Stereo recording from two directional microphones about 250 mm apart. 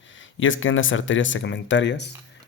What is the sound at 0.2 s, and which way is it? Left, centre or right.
Speech, left.